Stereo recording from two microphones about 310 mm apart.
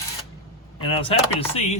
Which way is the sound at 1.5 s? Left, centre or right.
Left.